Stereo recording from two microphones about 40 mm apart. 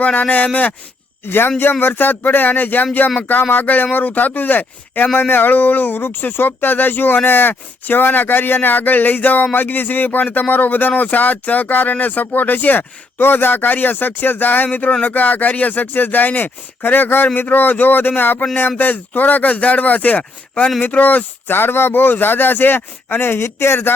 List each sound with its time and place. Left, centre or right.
0.0 s speech: left
1.2 s speech: left
5.1 s speech: left